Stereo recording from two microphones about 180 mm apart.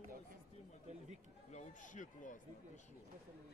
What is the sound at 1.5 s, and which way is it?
Speech, 45° left (ahead or behind).